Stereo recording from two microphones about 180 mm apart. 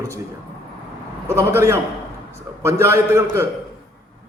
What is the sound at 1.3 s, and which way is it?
A man's voice, 15° right (ahead or behind).